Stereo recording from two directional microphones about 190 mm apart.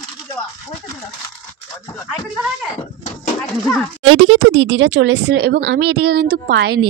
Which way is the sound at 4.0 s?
90° right.